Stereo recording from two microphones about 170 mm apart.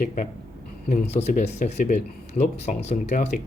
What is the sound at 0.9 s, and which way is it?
Speech, 40° left (ahead or behind).